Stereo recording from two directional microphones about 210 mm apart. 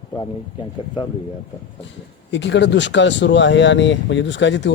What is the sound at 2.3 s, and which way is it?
A man's voice, 60° left (ahead or behind).